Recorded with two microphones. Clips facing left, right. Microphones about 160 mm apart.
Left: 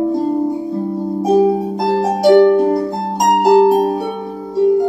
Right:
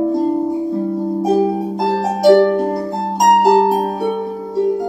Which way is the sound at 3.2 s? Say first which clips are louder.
Left 1 dB; centre (ahead or behind).